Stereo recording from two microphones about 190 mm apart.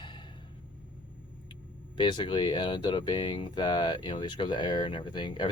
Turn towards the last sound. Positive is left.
turn(degrees=25)  # may be behind; listen again after turning